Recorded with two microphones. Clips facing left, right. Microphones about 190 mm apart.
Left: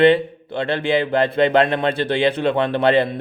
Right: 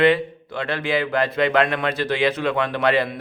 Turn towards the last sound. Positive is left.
turn(degrees=30)  # may be behind; listen again after turning